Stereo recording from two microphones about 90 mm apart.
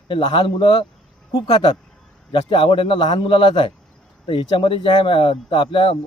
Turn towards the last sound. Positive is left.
turn(degrees=80)